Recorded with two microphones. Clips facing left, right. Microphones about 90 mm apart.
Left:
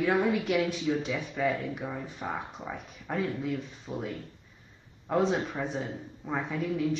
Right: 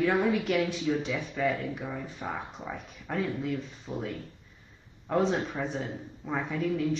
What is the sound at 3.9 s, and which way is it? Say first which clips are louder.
Speech: even; 10° right (ahead or behind).